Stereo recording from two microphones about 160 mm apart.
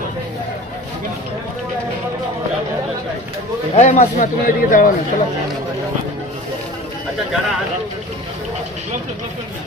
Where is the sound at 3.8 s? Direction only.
50° left (ahead or behind).